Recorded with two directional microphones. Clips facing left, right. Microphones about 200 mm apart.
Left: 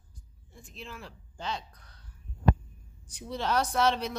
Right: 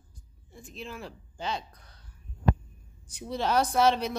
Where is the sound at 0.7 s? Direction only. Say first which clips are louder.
Right 4 dB; 10° right (ahead or behind).